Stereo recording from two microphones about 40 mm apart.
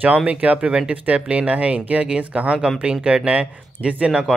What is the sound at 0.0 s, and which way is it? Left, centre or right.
Speech, right.